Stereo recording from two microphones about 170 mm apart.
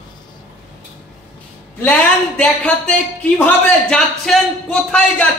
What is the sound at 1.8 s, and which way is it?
Speech, 10° left (ahead or behind).